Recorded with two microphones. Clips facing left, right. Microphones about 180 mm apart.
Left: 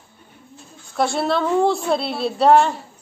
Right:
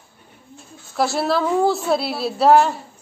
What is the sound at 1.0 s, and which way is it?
A woman's voice, centre (ahead or behind).